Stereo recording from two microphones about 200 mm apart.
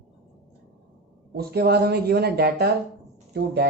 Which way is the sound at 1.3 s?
55° right (ahead or behind).